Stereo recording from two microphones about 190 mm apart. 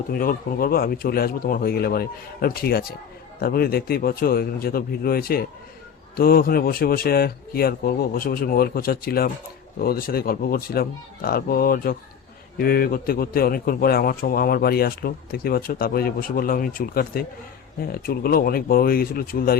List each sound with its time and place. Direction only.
0.1 s a man's voice: 50° left (ahead or behind)